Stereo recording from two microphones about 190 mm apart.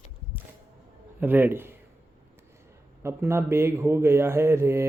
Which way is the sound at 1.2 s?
10° right (ahead or behind).